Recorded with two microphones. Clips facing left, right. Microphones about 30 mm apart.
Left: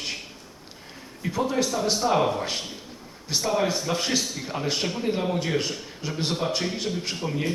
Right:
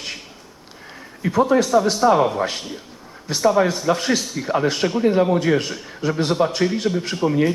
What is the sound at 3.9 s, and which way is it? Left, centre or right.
Speech, right.